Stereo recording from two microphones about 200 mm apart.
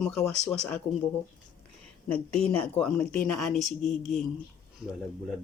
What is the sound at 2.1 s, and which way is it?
Speech, 5° left (ahead or behind).